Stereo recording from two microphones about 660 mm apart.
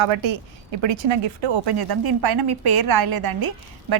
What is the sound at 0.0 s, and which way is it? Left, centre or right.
Speech, right.